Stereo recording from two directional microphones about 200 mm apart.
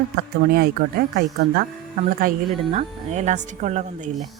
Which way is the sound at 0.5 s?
50° right (ahead or behind).